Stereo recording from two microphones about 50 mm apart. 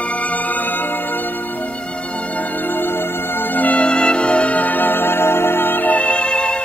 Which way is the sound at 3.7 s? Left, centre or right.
Centre.